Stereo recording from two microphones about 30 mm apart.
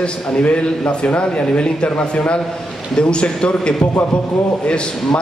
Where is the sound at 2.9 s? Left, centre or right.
Left.